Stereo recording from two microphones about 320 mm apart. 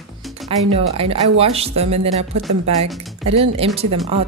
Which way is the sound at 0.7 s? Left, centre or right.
Centre.